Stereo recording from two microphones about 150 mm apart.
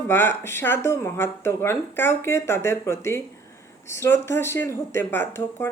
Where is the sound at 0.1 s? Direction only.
15° left (ahead or behind).